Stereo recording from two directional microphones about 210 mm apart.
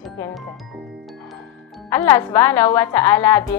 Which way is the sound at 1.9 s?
15° left (ahead or behind).